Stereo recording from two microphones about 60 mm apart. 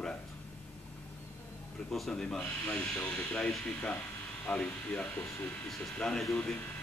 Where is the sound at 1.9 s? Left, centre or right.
Centre.